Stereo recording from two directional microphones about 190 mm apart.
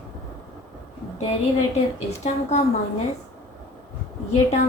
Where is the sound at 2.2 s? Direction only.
35° left (ahead or behind).